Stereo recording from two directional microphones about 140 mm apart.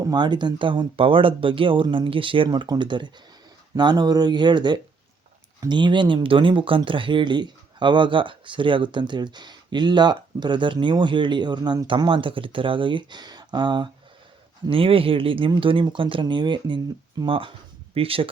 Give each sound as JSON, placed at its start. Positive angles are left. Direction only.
{"t": 0.0, "sound": "speech", "side_deg": -30}